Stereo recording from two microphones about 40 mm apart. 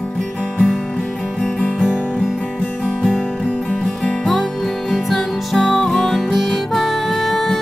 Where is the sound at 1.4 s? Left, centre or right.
Left.